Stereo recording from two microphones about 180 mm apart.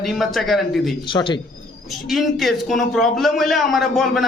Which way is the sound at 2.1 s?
Centre (ahead or behind).